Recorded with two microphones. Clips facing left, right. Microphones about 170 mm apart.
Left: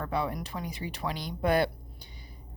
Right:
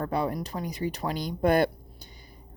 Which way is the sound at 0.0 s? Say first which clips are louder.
Right 3 dB; 40° right (ahead or behind).